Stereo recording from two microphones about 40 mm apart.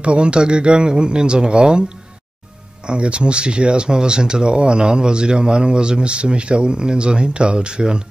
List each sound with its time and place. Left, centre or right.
0.0 s speech: right
2.9 s speech: right